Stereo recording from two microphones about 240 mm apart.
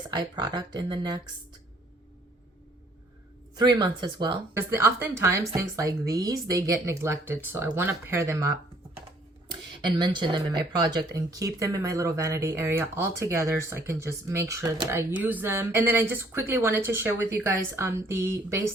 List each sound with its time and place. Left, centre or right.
0.1 s speech: centre
3.5 s speech: centre
9.5 s speech: centre